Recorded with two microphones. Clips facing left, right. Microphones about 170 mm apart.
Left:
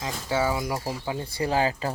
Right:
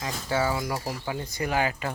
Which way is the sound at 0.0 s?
15° left (ahead or behind).